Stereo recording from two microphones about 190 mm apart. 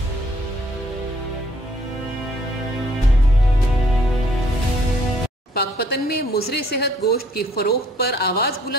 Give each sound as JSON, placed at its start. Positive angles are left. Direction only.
{"t": 5.5, "sound": "speech", "side_deg": 55}